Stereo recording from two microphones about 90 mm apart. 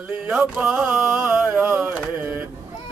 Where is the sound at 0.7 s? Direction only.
10° right (ahead or behind).